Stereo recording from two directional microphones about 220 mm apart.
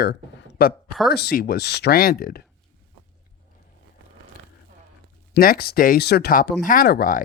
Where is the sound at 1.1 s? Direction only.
45° left (ahead or behind).